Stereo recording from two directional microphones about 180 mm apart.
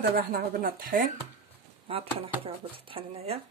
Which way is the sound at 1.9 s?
30° right (ahead or behind).